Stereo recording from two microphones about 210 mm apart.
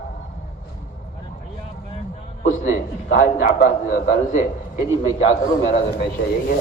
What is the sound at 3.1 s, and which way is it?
A man's voice, 50° left (ahead or behind).